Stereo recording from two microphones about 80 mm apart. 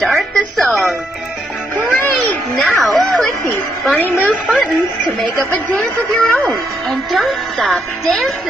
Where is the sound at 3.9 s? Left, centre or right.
Centre.